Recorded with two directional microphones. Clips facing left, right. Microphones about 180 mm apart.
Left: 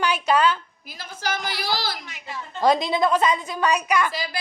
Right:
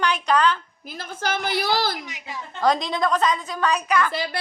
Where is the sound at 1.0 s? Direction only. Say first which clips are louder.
Right 2 dB; 55° right (ahead or behind).